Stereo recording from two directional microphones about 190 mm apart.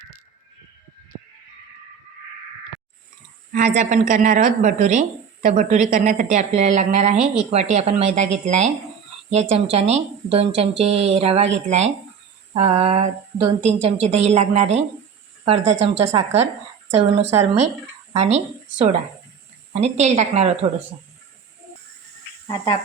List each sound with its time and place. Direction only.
3.5 s speech: 40° right (ahead or behind)
17.3 s speech: 15° right (ahead or behind)
18.1 s a woman's voice: 35° right (ahead or behind)
22.4 s speech: 20° left (ahead or behind)